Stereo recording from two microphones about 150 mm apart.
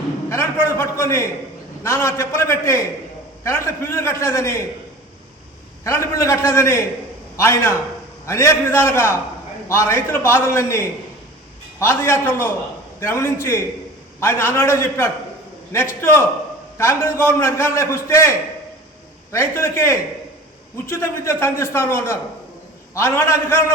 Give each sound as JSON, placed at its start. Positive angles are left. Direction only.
{"t": 0.3, "sound": "a man's voice", "side_deg": 20}
{"t": 5.8, "sound": "a man's voice", "side_deg": 20}